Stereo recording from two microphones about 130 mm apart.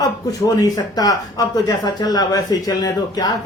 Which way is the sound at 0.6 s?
30° left (ahead or behind).